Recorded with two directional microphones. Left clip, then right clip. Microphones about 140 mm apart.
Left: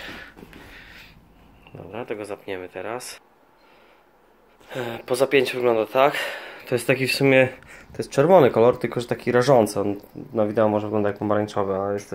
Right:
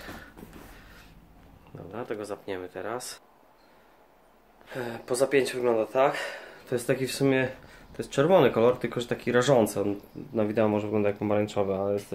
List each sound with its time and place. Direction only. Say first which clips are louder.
1.8 s speech: left 4 dB; 5° left (ahead or behind)
4.6 s speech: left 5 dB; 30° left (ahead or behind)
6.4 s a sound: left 6 dB; 40° left (ahead or behind)
6.9 s speech: left 7 dB; 50° left (ahead or behind); by 9.7 s 25° left (ahead or behind)
10.3 s speech: left 5 dB; 15° left (ahead or behind)